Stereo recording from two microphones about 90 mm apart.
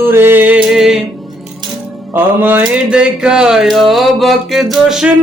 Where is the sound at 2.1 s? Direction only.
25° right (ahead or behind).